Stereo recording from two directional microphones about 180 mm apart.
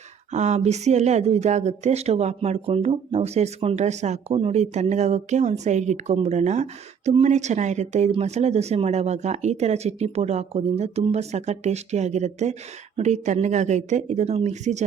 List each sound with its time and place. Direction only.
0.3 s speech: 40° right (ahead or behind)